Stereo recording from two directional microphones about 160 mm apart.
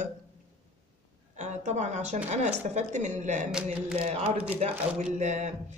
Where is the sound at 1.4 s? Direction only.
45° right (ahead or behind).